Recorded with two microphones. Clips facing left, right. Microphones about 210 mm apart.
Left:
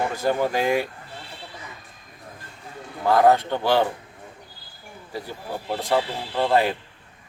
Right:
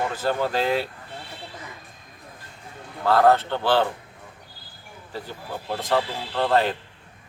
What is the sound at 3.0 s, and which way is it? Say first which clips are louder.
Speech: left 1 dB; 15° left (ahead or behind).